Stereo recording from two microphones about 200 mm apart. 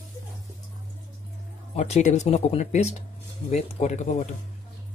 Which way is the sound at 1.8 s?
35° left (ahead or behind).